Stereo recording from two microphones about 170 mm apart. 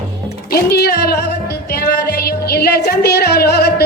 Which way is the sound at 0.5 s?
70° left (ahead or behind).